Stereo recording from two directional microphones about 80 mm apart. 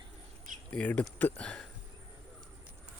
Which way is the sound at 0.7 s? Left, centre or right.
Centre.